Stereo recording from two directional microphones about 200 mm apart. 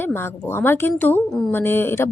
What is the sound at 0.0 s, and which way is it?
Speech, 10° left (ahead or behind).